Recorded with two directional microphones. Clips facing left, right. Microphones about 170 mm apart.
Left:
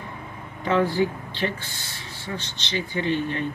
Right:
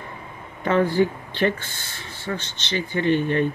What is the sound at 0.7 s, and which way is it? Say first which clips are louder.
Speech: right 2 dB; 55° right (ahead or behind).